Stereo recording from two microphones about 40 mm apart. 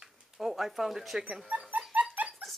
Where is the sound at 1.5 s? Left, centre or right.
Right.